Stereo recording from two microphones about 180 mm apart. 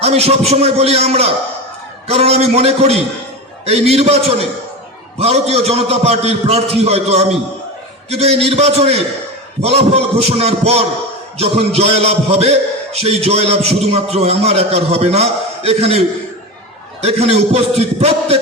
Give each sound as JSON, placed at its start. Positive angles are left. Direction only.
{"t": 0.0, "sound": "a man's voice", "side_deg": -35}
{"t": 5.2, "sound": "a man's voice", "side_deg": -35}
{"t": 17.0, "sound": "a man's voice", "side_deg": -35}